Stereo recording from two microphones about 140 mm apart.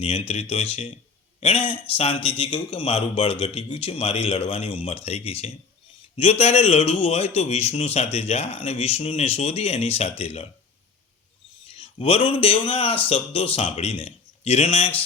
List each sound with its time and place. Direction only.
0.0 s a man's voice: 45° left (ahead or behind)
11.7 s a man's voice: 40° left (ahead or behind)